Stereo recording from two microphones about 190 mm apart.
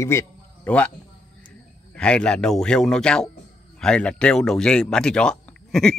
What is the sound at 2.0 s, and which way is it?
A man's voice, 5° left (ahead or behind).